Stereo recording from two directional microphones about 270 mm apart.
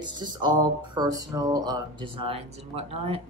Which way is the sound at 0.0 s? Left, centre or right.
Centre.